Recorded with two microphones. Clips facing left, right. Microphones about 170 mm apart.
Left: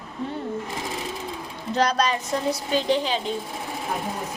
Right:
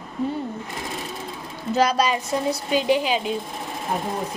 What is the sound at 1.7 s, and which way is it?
A woman's voice, 10° right (ahead or behind).